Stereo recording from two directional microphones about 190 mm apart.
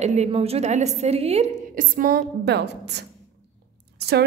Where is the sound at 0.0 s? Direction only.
35° right (ahead or behind).